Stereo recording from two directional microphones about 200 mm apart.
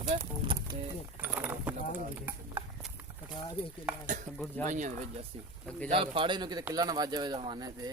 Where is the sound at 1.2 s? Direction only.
10° right (ahead or behind).